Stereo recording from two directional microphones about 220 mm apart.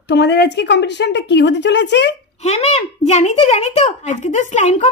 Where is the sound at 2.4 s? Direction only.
30° left (ahead or behind).